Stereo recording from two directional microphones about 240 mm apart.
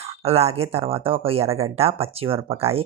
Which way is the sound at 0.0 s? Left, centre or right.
Right.